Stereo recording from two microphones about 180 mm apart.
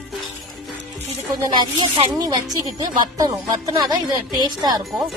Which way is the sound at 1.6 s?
25° right (ahead or behind).